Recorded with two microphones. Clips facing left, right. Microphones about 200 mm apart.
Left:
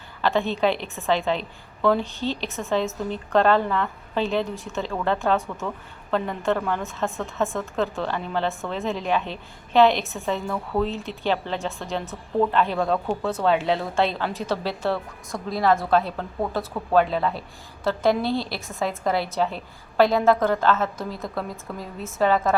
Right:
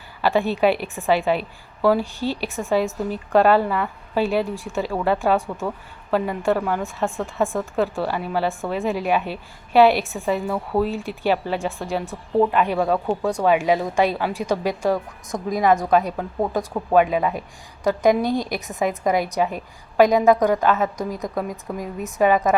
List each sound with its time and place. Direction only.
0.2 s a woman's voice: 10° right (ahead or behind)